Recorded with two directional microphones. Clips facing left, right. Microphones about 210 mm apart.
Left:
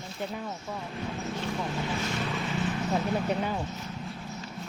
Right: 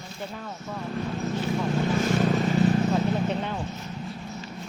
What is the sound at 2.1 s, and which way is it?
Vehicle, 45° right (ahead or behind).